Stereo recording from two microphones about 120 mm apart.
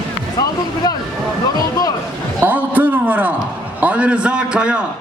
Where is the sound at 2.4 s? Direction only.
15° right (ahead or behind).